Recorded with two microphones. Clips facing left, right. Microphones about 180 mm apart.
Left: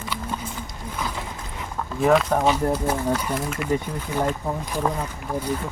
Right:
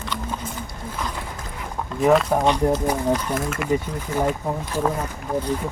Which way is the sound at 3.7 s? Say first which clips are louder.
Right 1 dB; 10° right (ahead or behind).